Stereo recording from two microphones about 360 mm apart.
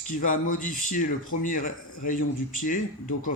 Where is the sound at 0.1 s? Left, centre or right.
Left.